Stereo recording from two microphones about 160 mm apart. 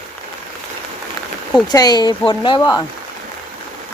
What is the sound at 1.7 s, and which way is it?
Speech, 25° left (ahead or behind).